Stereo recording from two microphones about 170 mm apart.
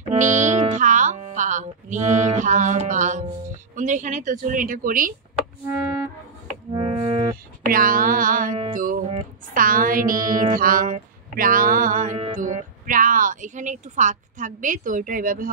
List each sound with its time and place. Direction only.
0.1 s music: 45° right (ahead or behind)
0.7 s a woman's voice: 50° right (ahead or behind)
6.7 s music: 25° right (ahead or behind)
7.7 s a woman's voice: 55° right (ahead or behind)